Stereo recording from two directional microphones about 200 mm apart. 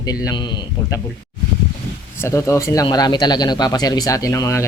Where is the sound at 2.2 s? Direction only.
15° left (ahead or behind).